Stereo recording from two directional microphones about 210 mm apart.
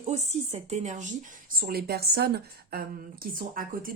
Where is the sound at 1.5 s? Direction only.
45° right (ahead or behind).